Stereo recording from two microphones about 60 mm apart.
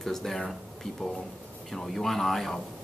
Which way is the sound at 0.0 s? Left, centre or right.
Centre.